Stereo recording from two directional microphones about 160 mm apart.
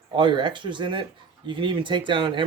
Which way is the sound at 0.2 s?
30° right (ahead or behind).